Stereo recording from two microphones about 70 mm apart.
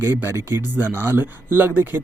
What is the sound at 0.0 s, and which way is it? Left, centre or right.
Speech, right.